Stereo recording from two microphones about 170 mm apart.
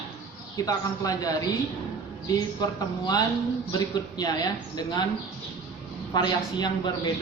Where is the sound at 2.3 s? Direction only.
20° left (ahead or behind).